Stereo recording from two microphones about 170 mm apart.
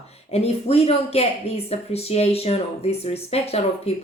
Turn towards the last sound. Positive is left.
turn(degrees=35)  # may be behind; listen again after turning